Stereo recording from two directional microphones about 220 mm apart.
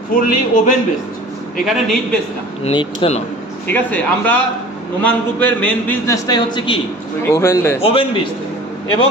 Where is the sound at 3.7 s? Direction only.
5° left (ahead or behind).